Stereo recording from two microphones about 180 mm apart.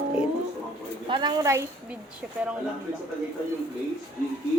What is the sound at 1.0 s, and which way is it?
Speech, 25° right (ahead or behind).